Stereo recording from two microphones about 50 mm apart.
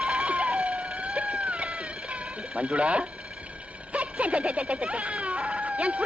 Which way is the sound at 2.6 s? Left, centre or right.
Right.